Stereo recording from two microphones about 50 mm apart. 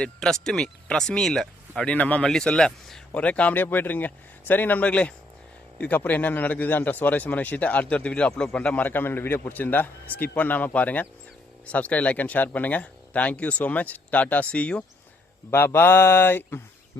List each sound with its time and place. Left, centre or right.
0.0 s speech: centre
1.9 s speech: left
2.2 s speech: centre
3.2 s speech: left
3.5 s speech: left
4.9 s speech: left
5.8 s speech: left; by 8.7 s centre
8.7 s speech: left
15.5 s mantra: left